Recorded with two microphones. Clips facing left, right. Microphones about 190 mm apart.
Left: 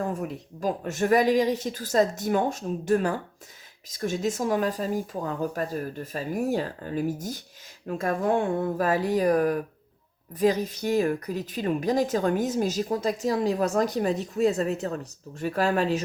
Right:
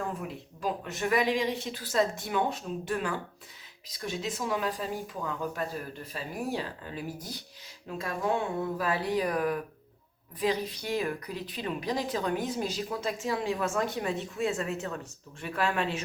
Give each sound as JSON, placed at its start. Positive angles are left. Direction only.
{"t": 0.1, "sound": "speech", "side_deg": 45}